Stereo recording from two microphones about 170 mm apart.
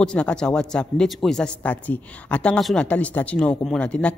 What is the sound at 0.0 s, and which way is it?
A man's voice, 5° left (ahead or behind).